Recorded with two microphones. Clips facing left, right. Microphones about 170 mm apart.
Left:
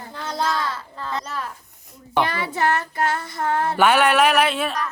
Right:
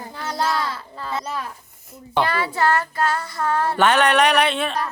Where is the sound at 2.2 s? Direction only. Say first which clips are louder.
Right 4 dB; 20° left (ahead or behind).